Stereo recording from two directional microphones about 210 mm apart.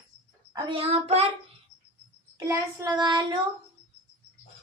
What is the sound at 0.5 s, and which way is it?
Speech, 30° right (ahead or behind).